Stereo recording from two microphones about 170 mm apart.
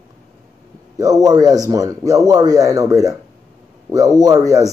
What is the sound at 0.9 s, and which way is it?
Speech, 20° right (ahead or behind).